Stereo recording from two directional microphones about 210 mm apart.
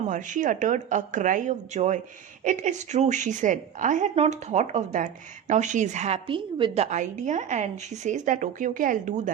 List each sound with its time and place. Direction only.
0.1 s a woman's voice: 40° right (ahead or behind)